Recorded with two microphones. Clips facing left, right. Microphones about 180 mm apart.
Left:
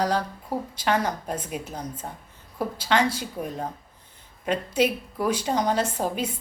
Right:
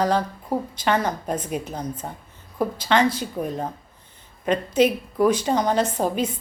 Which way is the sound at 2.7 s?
10° left (ahead or behind).